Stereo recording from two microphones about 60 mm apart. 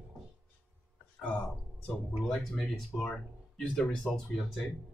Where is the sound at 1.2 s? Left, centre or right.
Centre.